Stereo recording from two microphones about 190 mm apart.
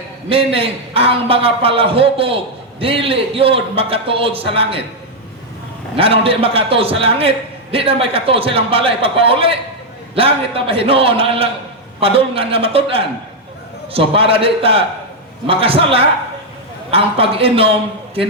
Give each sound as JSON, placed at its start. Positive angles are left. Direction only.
{"t": 0.3, "sound": "a man's voice", "side_deg": -30}
{"t": 6.0, "sound": "a man's voice", "side_deg": -30}